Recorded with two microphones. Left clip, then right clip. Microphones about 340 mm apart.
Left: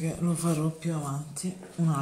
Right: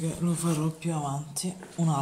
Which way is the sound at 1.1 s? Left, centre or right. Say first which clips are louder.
Right 3 dB; right.